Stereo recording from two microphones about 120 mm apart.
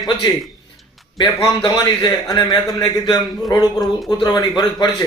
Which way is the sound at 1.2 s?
40° left (ahead or behind).